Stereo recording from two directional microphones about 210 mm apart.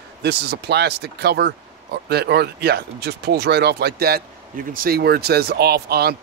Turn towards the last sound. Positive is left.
turn(degrees=-50)  # may be behind; listen again after turning